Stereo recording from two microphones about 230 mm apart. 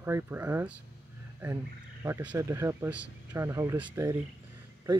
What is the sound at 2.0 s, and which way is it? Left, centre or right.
Speech, centre.